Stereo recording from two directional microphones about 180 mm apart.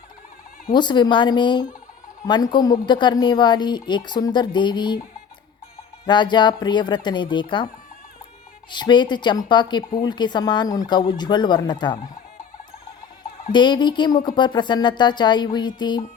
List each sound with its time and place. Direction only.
0.7 s speech: 25° left (ahead or behind)
6.1 s speech: 25° left (ahead or behind)
8.7 s speech: 25° left (ahead or behind)
13.5 s speech: 25° left (ahead or behind)